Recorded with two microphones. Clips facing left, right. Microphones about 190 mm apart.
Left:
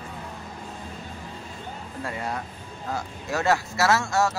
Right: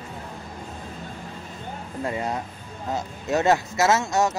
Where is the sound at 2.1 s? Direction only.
20° right (ahead or behind).